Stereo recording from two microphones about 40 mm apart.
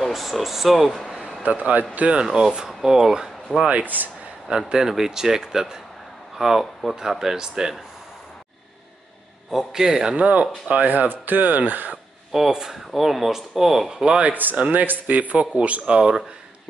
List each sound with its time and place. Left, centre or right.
0.0 s speech: centre
1.4 s a man's voice: right
2.2 s speech: centre
3.5 s a man's voice: right
3.8 s speech: right
4.7 s speech: centre
6.6 s speech: centre
7.0 s speech: centre
9.5 s speech: centre
10.1 s a man's voice: right
12.3 s speech: centre
13.8 s speech: right
14.2 s a man's voice: right
15.9 s speech: centre